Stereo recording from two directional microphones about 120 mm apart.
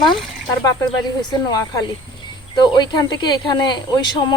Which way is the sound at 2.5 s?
40° left (ahead or behind).